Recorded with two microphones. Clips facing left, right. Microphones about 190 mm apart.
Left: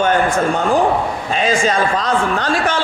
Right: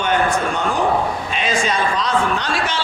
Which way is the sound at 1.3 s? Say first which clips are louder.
Left 7 dB; 40° left (ahead or behind).